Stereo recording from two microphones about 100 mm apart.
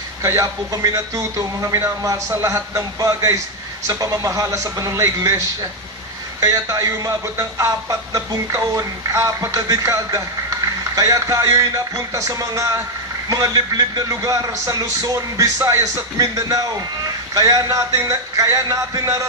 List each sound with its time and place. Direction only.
0.2 s speech: 30° right (ahead or behind)